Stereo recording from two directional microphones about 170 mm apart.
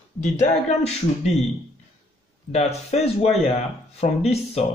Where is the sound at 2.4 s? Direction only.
40° left (ahead or behind).